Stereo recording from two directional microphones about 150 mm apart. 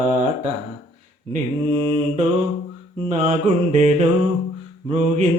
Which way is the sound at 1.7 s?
35° right (ahead or behind).